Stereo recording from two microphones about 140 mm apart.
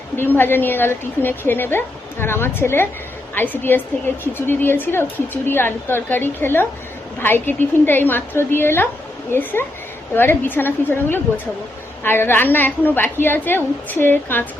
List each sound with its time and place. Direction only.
0.2 s a woman's voice: 15° left (ahead or behind)